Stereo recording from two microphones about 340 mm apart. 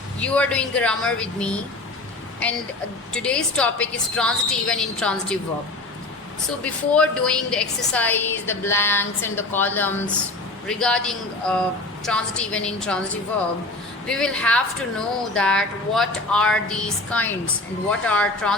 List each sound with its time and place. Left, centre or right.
0.2 s speech: centre
3.1 s speech: centre
6.7 s speech: centre
14.1 s speech: centre